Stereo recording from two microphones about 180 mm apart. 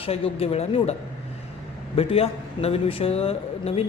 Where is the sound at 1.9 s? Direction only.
35° left (ahead or behind).